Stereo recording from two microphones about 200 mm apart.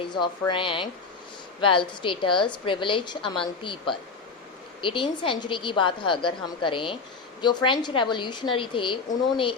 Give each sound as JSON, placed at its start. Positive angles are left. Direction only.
{"t": 0.0, "sound": "a woman's voice", "side_deg": 25}